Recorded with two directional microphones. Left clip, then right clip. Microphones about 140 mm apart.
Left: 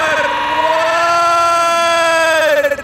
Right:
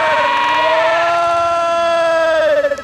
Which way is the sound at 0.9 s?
40° left (ahead or behind).